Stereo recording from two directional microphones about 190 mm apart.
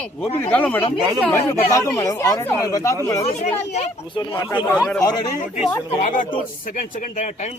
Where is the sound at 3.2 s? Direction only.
35° left (ahead or behind).